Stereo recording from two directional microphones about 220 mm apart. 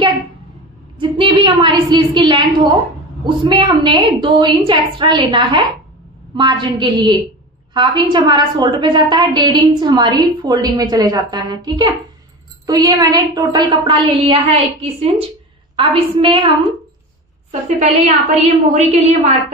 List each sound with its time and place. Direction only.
0.9 s a woman's voice: 25° right (ahead or behind)